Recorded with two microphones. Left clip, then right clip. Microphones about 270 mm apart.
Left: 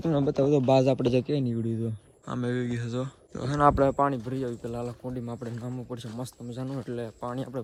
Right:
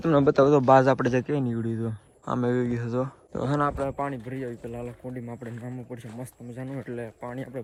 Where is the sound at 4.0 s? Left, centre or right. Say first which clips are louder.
Left 5 dB; centre.